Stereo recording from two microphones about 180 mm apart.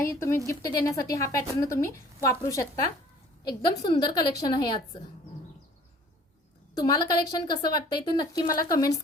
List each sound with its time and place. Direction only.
0.0 s a woman's voice: 15° left (ahead or behind)
6.7 s a woman's voice: 20° left (ahead or behind)